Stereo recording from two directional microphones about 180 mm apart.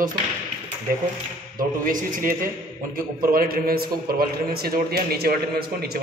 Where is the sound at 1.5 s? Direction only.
50° right (ahead or behind).